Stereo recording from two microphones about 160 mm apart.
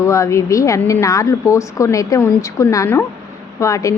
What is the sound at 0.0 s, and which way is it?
A woman's voice, 20° left (ahead or behind).